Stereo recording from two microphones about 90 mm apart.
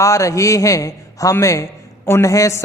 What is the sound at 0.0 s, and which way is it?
A man's voice, 35° left (ahead or behind).